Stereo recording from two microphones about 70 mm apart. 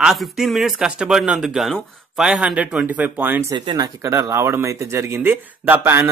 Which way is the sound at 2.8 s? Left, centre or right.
Right.